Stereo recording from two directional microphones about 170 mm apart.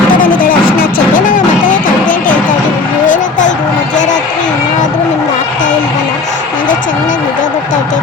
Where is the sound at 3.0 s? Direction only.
50° left (ahead or behind).